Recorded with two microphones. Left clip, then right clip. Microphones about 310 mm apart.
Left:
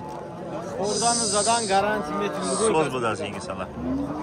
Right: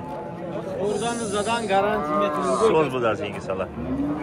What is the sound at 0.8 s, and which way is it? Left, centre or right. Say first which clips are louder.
Speech: left 3 dB; left.